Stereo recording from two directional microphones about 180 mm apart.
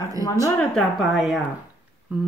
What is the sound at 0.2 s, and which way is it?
Speech, 20° right (ahead or behind).